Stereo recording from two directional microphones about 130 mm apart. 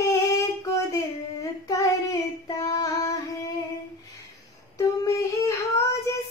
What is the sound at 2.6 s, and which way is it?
Female singing, 25° left (ahead or behind).